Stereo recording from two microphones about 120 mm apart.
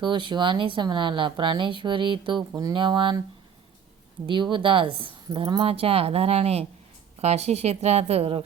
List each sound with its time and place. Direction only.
0.0 s speech: 40° right (ahead or behind)
4.5 s speech: 45° right (ahead or behind)